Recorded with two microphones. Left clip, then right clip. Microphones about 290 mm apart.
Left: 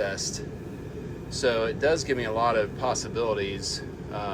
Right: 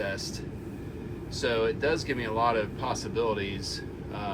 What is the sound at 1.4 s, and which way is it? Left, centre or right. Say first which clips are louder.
Speech: left 3 dB; centre.